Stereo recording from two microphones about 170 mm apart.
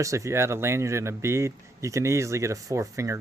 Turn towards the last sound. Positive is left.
turn(degrees=-20)  # may be behind; listen again after turning